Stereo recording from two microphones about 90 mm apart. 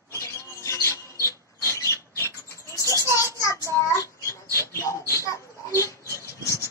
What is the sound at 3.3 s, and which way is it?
Child singing, 35° left (ahead or behind).